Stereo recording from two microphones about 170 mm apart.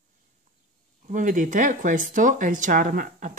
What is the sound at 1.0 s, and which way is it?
Speech, 50° right (ahead or behind).